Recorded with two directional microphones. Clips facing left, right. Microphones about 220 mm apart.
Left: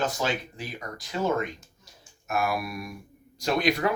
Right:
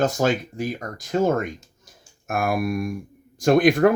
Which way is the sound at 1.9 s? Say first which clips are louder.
Right 4 dB; 50° right (ahead or behind).